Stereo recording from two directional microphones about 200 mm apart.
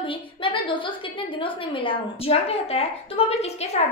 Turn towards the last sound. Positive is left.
turn(degrees=30)  # may be behind; listen again after turning